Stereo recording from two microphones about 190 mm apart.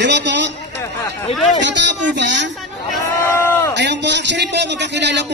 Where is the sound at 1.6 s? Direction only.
70° right (ahead or behind).